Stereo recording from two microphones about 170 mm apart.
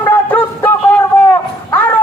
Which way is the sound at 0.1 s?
10° left (ahead or behind).